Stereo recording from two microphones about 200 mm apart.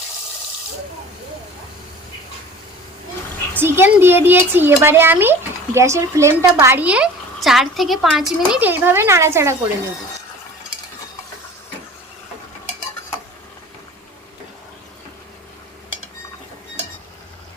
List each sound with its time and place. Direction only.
3.6 s a woman's voice: 10° right (ahead or behind)